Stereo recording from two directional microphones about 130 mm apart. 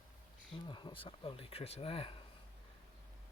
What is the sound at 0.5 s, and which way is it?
Speech, 40° left (ahead or behind).